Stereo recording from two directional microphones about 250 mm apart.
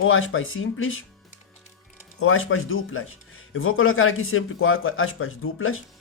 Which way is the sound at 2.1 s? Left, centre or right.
Left.